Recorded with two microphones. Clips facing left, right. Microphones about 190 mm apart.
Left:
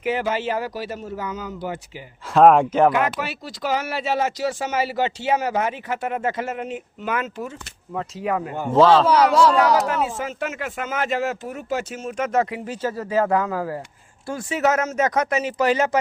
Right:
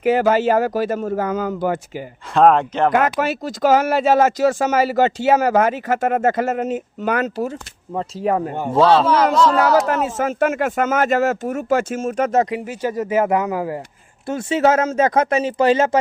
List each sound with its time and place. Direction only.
0.0 s speech: 45° right (ahead or behind)
2.3 s speech: 5° left (ahead or behind)
2.9 s speech: 45° right (ahead or behind)
8.7 s speech: 10° right (ahead or behind)
9.0 s speech: 10° left (ahead or behind)
10.0 s speech: 45° right (ahead or behind)
12.5 s speech: 15° right (ahead or behind)